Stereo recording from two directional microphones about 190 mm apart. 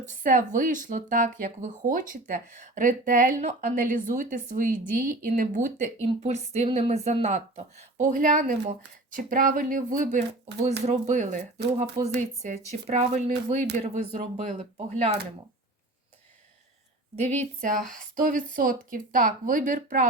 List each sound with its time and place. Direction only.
0.0 s speech: 45° right (ahead or behind)
17.2 s speech: 40° right (ahead or behind)